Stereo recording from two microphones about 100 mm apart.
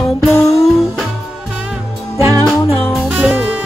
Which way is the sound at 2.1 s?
30° right (ahead or behind).